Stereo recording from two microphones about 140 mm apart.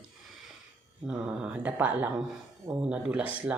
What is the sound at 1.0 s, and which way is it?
Speech, 5° right (ahead or behind).